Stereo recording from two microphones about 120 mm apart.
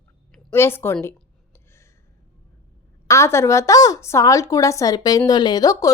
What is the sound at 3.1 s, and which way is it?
A woman's voice, 25° left (ahead or behind).